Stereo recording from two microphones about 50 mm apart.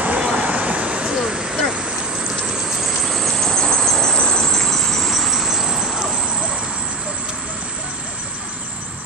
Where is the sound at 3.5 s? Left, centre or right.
Centre; by 8.7 s right.